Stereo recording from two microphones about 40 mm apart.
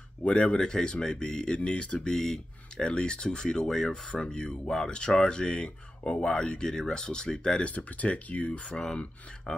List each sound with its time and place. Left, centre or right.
0.2 s speech: left
2.0 s speech: centre
7.6 s speech: left
8.7 s speech: centre